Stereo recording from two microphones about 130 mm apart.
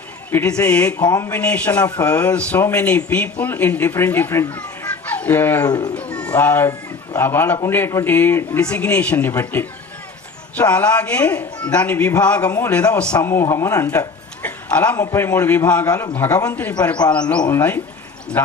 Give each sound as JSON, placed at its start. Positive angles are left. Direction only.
{"t": 0.3, "sound": "speech", "side_deg": 15}
{"t": 1.0, "sound": "a man's voice", "side_deg": 25}
{"t": 1.3, "sound": "speech", "side_deg": 10}
{"t": 5.6, "sound": "speech", "side_deg": 30}
{"t": 6.0, "sound": "speech", "side_deg": 10}
{"t": 13.1, "sound": "speech", "side_deg": 20}
{"t": 14.9, "sound": "speech", "side_deg": 20}
{"t": 15.9, "sound": "a man's voice", "side_deg": 30}
{"t": 16.1, "sound": "speech", "side_deg": 15}